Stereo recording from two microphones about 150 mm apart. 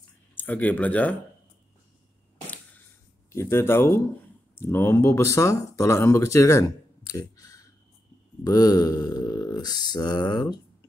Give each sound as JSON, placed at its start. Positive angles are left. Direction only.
{"t": 0.4, "sound": "speech", "side_deg": 10}
{"t": 3.3, "sound": "speech", "side_deg": 20}
{"t": 8.5, "sound": "mantra", "side_deg": 25}